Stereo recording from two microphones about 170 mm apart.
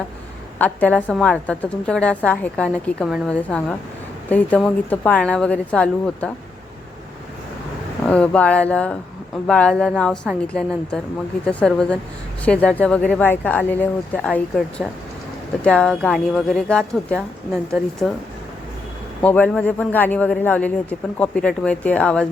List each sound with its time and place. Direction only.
0.6 s a woman's voice: 10° left (ahead or behind)
8.0 s a woman's voice: 5° left (ahead or behind)
19.2 s a woman's voice: 10° left (ahead or behind)